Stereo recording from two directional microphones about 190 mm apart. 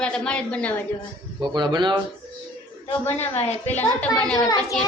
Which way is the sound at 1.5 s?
25° right (ahead or behind).